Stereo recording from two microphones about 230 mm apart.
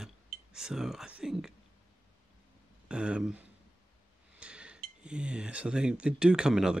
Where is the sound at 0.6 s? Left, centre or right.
Centre.